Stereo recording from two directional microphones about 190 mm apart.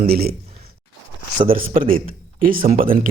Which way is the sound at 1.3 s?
30° right (ahead or behind).